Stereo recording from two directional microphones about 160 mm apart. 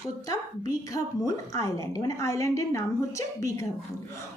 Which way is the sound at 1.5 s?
20° left (ahead or behind).